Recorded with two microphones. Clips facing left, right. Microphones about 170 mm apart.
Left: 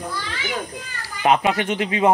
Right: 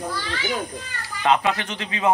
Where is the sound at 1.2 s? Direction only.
20° left (ahead or behind).